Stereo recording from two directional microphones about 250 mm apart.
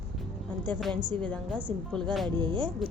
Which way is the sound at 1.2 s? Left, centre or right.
Centre.